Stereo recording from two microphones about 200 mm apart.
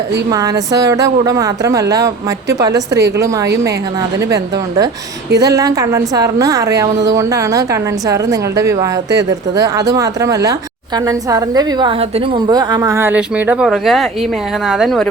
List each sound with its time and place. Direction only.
0.3 s a woman's voice: 20° right (ahead or behind); by 15.1 s centre (ahead or behind)